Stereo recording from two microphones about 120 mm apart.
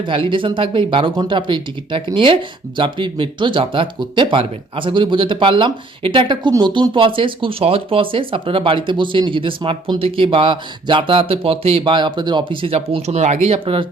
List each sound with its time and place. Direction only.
0.0 s speech: 45° right (ahead or behind)